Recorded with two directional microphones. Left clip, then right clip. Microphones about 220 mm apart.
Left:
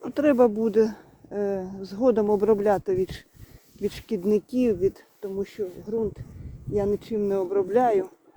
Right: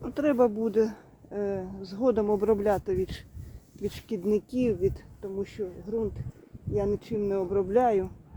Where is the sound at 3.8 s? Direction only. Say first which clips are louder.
Left 4 dB; 30° left (ahead or behind).